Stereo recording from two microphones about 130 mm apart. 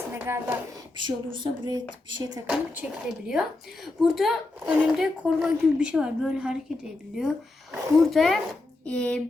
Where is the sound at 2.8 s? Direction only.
5° right (ahead or behind).